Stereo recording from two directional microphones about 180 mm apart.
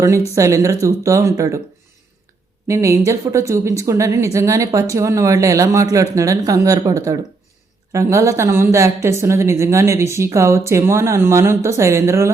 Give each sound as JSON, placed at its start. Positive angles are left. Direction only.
{"t": 0.3, "sound": "speech", "side_deg": -15}
{"t": 2.6, "sound": "speech", "side_deg": -15}